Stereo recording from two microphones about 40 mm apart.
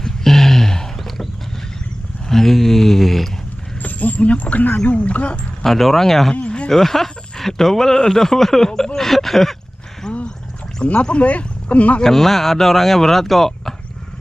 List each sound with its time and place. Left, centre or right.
0.0 s a sound: centre
2.2 s speech: centre
3.8 s speech: left
5.6 s speech: centre
6.3 s a sound: left
6.7 s speech: centre
10.8 s speech: left
12.0 s speech: centre